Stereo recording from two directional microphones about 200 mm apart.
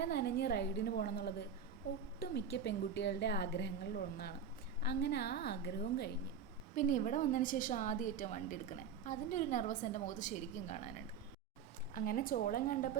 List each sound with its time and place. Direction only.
0.0 s a woman's voice: 55° left (ahead or behind)
6.7 s a woman's voice: 40° left (ahead or behind)
11.9 s a woman's voice: 45° left (ahead or behind)